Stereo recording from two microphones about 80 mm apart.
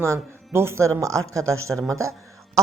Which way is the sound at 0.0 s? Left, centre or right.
Right.